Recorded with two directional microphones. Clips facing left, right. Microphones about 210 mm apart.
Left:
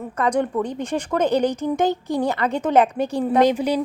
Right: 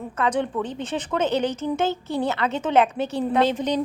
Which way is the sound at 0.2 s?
10° left (ahead or behind).